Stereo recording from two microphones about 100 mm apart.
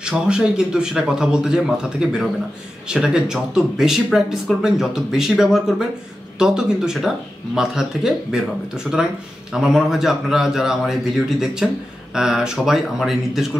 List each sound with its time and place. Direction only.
0.0 s a man's voice: 10° right (ahead or behind)